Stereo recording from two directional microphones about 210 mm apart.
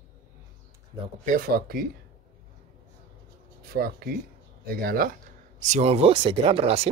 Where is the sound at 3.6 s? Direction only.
45° right (ahead or behind).